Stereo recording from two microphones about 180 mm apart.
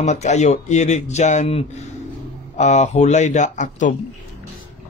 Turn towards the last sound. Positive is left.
turn(degrees=45)  # may be behind; listen again after turning